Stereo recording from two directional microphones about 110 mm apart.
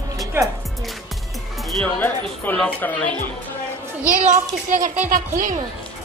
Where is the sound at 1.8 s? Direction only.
15° left (ahead or behind).